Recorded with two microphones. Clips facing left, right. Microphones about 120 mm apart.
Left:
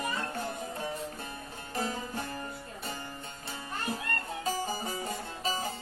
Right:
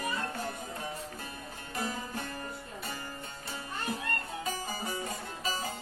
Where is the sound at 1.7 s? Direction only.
35° left (ahead or behind).